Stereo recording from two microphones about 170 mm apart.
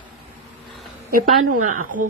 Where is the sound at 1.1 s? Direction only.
50° right (ahead or behind).